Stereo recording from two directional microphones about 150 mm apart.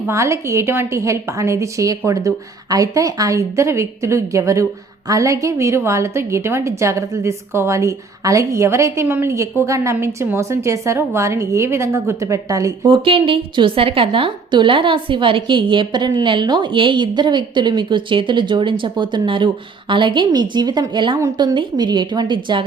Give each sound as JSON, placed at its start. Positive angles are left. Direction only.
{"t": 0.1, "sound": "a woman's voice", "side_deg": -20}
{"t": 12.8, "sound": "a woman's voice", "side_deg": -35}